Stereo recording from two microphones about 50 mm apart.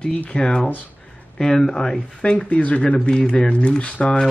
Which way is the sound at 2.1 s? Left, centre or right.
Left.